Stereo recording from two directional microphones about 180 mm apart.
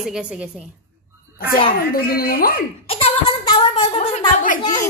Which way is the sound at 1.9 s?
55° left (ahead or behind).